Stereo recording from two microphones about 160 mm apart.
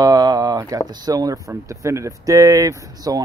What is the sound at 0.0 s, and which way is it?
Speech, 25° right (ahead or behind).